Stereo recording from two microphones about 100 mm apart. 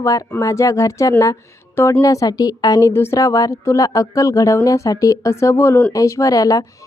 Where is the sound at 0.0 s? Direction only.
35° left (ahead or behind).